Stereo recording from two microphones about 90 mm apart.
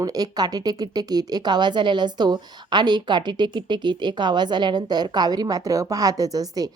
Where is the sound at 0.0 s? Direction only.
45° right (ahead or behind).